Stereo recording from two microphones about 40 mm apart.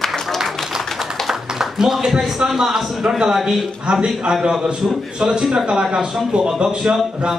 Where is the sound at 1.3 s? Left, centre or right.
Centre.